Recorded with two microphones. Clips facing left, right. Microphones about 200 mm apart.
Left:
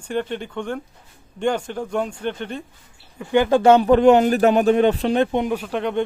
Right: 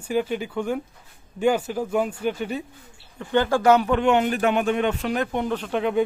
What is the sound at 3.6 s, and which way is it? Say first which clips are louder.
Speech: left 7 dB; 30° left (ahead or behind).